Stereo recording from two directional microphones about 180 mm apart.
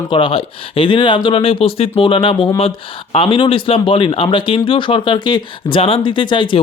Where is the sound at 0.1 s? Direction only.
30° left (ahead or behind).